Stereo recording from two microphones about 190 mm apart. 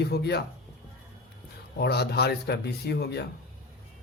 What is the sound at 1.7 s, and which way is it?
Speech, 60° left (ahead or behind).